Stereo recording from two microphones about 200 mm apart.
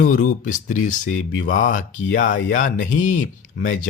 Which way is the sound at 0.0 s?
40° left (ahead or behind).